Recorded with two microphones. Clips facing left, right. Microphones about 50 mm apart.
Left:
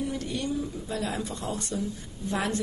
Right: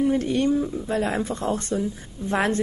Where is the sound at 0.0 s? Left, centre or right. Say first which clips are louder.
Right 10 dB; right.